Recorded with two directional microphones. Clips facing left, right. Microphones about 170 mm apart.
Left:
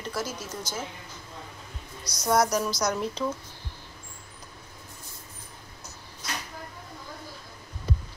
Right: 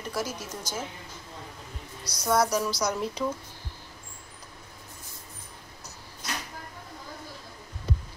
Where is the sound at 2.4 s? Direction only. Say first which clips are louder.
Left 1 dB; 5° right (ahead or behind).